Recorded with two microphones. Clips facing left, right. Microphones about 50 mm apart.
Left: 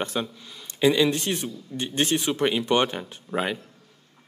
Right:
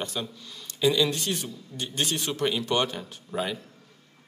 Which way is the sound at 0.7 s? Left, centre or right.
Left.